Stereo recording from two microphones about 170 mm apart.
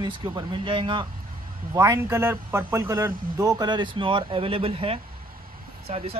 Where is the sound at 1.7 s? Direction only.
20° right (ahead or behind); by 6.2 s 35° right (ahead or behind).